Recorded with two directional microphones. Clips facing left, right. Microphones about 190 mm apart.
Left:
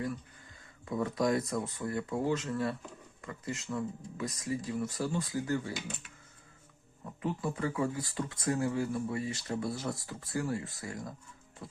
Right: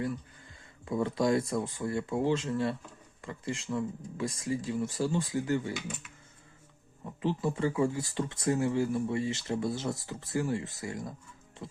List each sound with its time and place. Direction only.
0.9 s speech: 25° right (ahead or behind)
7.2 s speech: 25° right (ahead or behind)
11.6 s music: 20° right (ahead or behind)